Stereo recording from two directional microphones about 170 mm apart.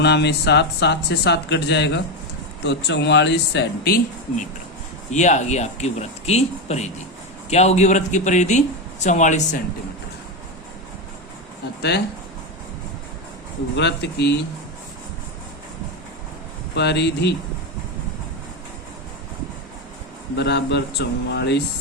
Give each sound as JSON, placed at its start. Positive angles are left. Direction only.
{"t": 0.0, "sound": "speech", "side_deg": 90}
{"t": 5.1, "sound": "a man's voice", "side_deg": 45}
{"t": 11.8, "sound": "speech", "side_deg": 80}
{"t": 13.7, "sound": "speech", "side_deg": 90}
{"t": 16.7, "sound": "speech", "side_deg": 80}
{"t": 20.3, "sound": "speech", "side_deg": 85}